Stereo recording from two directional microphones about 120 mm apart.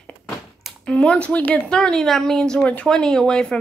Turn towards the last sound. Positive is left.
turn(degrees=5)  # may be behind; listen again after turning